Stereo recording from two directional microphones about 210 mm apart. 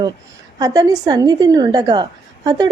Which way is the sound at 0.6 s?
20° right (ahead or behind).